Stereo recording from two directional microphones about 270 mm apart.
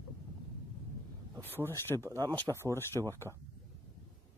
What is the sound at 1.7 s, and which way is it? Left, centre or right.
Speech, centre.